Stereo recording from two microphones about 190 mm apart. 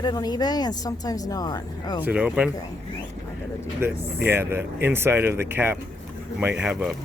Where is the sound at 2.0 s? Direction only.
5° right (ahead or behind).